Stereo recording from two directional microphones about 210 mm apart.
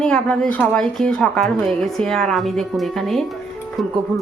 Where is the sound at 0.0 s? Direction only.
5° left (ahead or behind).